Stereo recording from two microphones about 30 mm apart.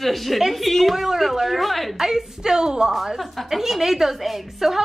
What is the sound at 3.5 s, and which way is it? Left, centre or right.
A woman's voice, centre.